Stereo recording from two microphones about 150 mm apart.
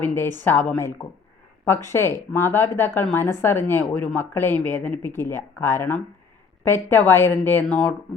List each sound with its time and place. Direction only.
0.0 s speech: 15° left (ahead or behind)